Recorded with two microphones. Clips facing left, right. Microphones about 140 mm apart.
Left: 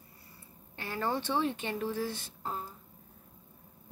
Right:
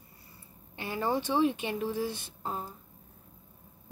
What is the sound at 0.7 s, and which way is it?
Speech, 15° right (ahead or behind).